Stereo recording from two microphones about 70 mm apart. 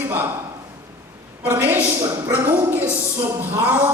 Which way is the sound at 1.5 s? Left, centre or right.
Right.